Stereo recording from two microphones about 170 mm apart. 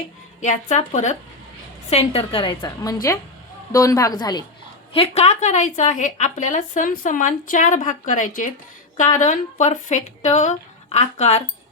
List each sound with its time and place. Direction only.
0.4 s a woman's voice: 45° left (ahead or behind); by 4.4 s 25° left (ahead or behind)
4.9 s a woman's voice: 40° left (ahead or behind)